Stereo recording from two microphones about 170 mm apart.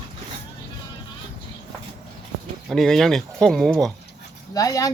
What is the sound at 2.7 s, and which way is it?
Speech, centre (ahead or behind).